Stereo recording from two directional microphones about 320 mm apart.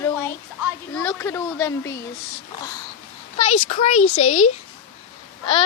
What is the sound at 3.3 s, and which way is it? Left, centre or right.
Speech, centre.